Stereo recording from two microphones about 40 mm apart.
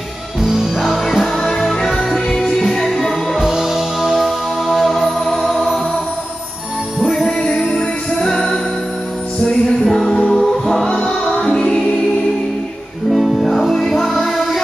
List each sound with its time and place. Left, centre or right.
0.4 s music: centre
1.2 s music: centre
3.3 s music: centre
7.3 s music: centre
9.4 s music: centre
13.6 s music: centre